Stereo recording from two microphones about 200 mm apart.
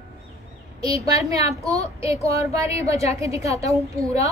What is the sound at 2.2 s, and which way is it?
A woman's voice, 15° right (ahead or behind).